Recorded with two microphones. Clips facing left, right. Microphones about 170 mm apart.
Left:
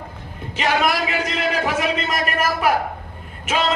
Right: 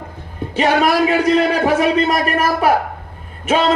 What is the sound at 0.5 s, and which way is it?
Speech, 35° right (ahead or behind).